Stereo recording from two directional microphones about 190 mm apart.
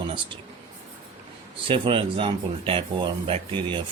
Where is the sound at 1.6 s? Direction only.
25° right (ahead or behind).